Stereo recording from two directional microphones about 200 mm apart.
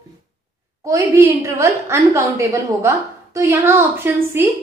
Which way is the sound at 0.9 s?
15° right (ahead or behind).